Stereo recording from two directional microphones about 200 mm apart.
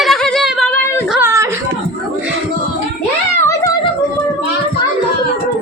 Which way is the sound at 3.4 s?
15° left (ahead or behind).